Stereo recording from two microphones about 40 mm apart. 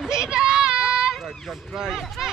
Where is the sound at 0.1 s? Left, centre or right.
Centre.